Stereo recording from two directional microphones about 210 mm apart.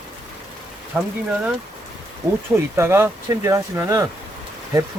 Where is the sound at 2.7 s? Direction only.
10° right (ahead or behind).